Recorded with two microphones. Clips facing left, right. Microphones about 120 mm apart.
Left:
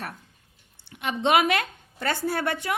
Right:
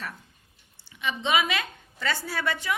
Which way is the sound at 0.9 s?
60° left (ahead or behind).